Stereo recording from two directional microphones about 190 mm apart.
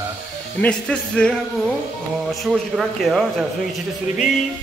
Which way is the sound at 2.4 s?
Centre (ahead or behind).